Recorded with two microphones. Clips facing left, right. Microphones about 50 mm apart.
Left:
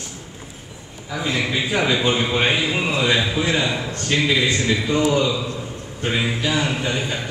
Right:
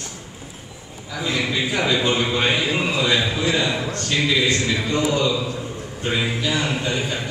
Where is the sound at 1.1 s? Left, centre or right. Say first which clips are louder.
Left 1 dB; centre.